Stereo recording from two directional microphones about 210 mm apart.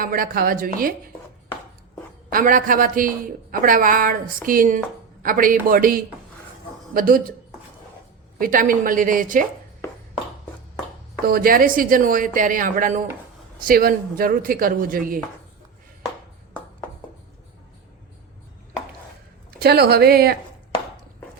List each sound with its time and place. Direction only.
0.0 s speech: 45° right (ahead or behind)
2.3 s speech: 40° right (ahead or behind)
8.4 s speech: 40° right (ahead or behind)
11.3 s speech: 45° right (ahead or behind)
19.5 s speech: 50° right (ahead or behind)